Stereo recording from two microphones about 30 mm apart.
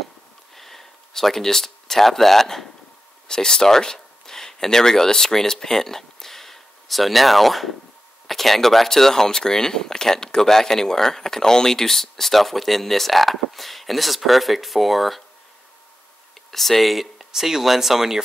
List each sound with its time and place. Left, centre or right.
0.6 s speech: centre
3.3 s speech: left; by 15.2 s centre
16.4 s speech: centre
17.3 s speech: centre